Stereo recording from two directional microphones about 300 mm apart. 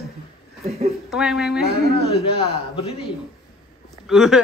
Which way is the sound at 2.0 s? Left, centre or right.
Centre.